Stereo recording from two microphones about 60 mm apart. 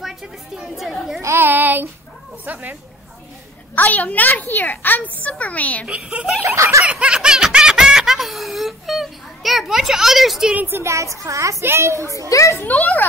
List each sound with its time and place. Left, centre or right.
0.0 s a sound: centre
0.7 s speech: centre
1.2 s child singing: right
2.4 s speech: right
3.7 s a woman's voice: left
5.9 s speech: centre
6.4 s a woman's voice: right
6.9 s laughter: centre
10.7 s a woman's voice: right
11.6 s a child's voice: right
12.3 s a child's voice: left
12.6 s a woman's voice: left